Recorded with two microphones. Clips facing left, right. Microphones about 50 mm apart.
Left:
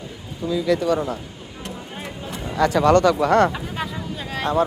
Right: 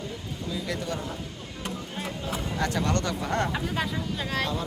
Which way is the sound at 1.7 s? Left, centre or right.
Centre.